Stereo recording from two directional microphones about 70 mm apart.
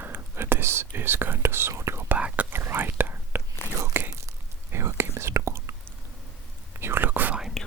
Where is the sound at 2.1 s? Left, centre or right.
Right.